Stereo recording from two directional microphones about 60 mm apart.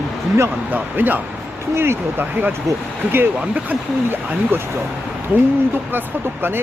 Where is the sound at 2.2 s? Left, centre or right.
Right.